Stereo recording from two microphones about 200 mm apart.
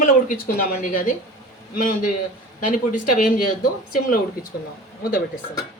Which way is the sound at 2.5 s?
40° left (ahead or behind).